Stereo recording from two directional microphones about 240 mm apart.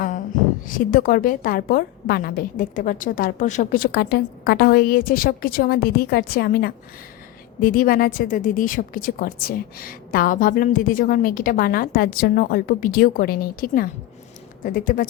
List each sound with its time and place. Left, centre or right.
0.6 s a woman's voice: left